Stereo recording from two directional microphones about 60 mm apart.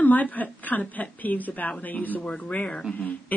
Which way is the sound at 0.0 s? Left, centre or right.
Left.